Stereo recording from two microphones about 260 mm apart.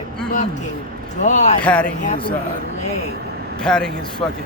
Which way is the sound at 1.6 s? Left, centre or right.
Centre.